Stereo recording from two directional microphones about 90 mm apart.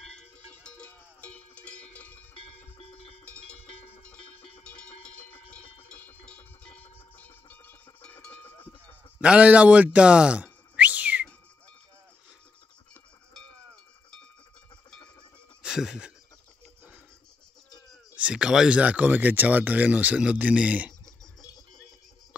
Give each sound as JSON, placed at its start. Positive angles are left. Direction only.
{"t": 0.1, "sound": "cowbell", "side_deg": 10}
{"t": 2.8, "sound": "cowbell", "side_deg": 90}
{"t": 3.3, "sound": "cowbell", "side_deg": 15}
{"t": 5.9, "sound": "cowbell", "side_deg": 15}
{"t": 9.2, "sound": "whistling", "side_deg": -15}
{"t": 15.6, "sound": "speech", "side_deg": -5}
{"t": 18.1, "sound": "speech", "side_deg": -10}